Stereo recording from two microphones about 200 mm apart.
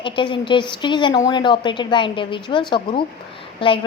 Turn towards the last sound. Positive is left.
turn(degrees=25)  # may be behind; listen again after turning